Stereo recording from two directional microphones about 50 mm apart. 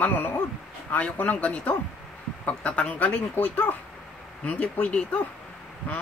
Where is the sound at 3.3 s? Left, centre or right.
Left.